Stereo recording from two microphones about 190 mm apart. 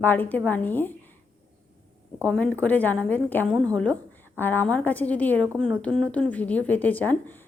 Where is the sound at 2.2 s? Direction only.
5° left (ahead or behind).